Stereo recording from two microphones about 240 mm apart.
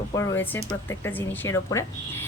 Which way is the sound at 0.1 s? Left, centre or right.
Centre.